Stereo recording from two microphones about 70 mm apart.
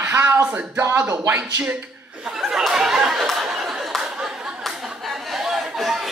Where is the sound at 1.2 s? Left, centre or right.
Right.